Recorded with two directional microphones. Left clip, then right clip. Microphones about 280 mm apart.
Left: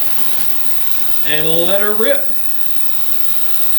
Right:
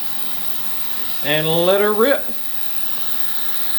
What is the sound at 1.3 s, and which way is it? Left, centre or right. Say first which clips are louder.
Speech: right 1 dB; centre.